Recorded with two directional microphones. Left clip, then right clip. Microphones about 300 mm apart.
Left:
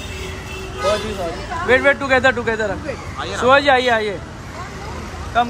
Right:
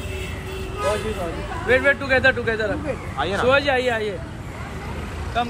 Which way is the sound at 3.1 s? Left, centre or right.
Centre.